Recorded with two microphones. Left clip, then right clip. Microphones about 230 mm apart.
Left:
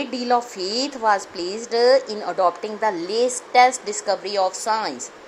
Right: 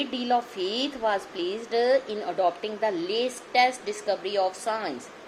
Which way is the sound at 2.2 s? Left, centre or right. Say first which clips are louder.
Left 5 dB; left.